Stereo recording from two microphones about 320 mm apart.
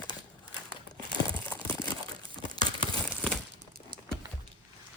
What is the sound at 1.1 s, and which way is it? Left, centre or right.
Crumpling, centre.